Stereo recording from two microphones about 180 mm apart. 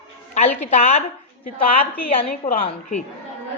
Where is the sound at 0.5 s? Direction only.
40° left (ahead or behind).